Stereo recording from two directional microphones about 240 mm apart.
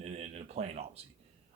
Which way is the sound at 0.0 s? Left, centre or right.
Right.